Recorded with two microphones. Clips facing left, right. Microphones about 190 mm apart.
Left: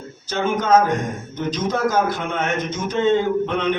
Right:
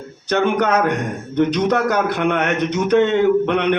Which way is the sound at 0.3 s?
65° right (ahead or behind).